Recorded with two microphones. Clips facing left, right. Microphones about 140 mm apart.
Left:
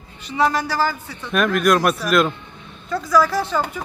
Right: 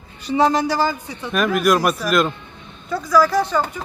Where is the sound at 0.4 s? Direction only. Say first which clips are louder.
Right 2 dB; 20° right (ahead or behind).